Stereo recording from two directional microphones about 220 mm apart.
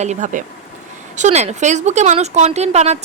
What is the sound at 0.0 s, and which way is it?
A woman's voice, 35° right (ahead or behind).